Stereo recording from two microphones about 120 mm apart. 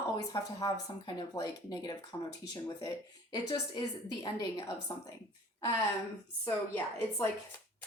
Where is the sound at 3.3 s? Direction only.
35° left (ahead or behind).